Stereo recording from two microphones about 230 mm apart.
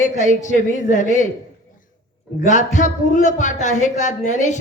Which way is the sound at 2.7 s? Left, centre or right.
Left.